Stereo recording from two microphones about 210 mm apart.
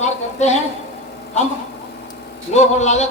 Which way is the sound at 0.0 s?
30° left (ahead or behind).